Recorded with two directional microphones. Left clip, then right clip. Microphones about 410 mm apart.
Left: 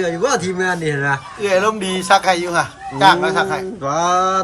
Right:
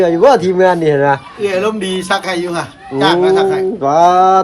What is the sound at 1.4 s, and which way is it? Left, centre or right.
A man's voice, centre.